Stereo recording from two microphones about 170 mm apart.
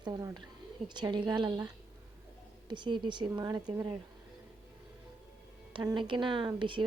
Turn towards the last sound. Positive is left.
turn(degrees=-30)  # may be behind; listen again after turning